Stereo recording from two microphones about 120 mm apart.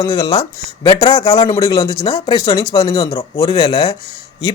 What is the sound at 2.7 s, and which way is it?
Speech, 40° left (ahead or behind).